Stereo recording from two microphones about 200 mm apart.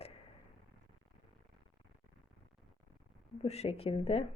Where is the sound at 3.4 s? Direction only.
30° left (ahead or behind).